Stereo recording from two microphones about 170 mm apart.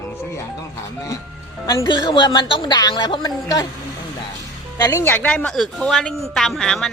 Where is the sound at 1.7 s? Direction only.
25° left (ahead or behind).